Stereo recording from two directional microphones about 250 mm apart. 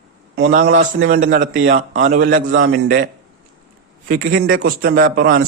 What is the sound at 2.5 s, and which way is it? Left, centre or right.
Speech, right.